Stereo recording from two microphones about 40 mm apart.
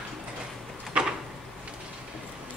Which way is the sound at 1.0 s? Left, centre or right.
Right.